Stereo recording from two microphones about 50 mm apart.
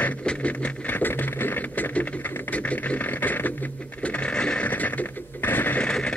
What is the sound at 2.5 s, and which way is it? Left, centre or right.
Sewing machine, left.